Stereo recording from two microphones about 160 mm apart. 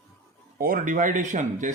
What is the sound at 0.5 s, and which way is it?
Speech, 60° right (ahead or behind).